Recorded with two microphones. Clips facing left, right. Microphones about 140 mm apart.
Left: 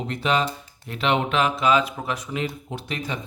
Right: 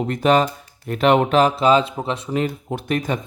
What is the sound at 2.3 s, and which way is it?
Speech, 50° right (ahead or behind).